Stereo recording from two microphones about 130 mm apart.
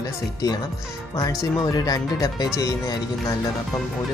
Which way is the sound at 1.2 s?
25° left (ahead or behind).